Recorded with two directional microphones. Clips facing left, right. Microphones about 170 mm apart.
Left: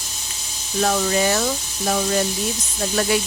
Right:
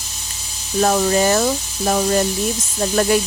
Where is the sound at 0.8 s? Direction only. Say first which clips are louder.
Right 4 dB; 40° right (ahead or behind).